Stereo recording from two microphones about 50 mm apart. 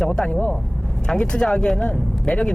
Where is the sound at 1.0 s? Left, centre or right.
Centre.